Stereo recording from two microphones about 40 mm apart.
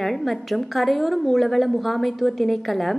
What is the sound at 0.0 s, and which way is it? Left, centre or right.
A woman's voice, centre.